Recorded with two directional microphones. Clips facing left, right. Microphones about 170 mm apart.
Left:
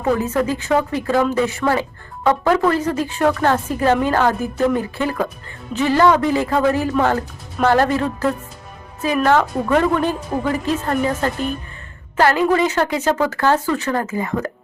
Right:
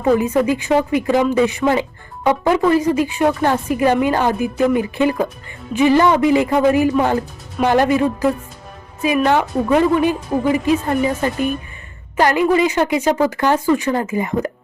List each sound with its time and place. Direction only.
0.2 s speech: 15° right (ahead or behind)